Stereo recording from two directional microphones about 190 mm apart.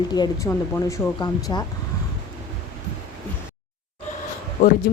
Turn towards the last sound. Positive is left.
turn(degrees=40)  # may be behind; listen again after turning